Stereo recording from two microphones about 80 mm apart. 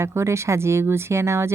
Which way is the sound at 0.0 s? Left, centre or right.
Right.